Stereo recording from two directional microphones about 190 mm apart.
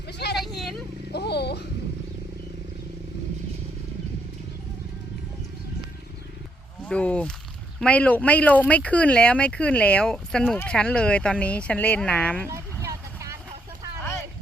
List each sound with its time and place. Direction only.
0.1 s vehicle: 60° left (ahead or behind)
0.3 s vehicle: centre (ahead or behind)
1.1 s a sound: 60° left (ahead or behind)
6.8 s speech: 5° left (ahead or behind)
12.5 s a sound: 15° right (ahead or behind)
14.0 s boat: 10° left (ahead or behind)